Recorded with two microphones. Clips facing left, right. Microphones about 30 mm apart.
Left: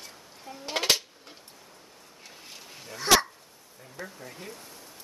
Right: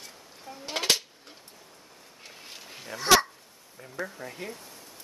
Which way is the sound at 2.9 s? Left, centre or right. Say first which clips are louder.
Right 1 dB; centre.